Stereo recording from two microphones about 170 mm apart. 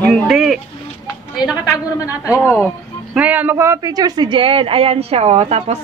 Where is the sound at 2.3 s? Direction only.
15° left (ahead or behind).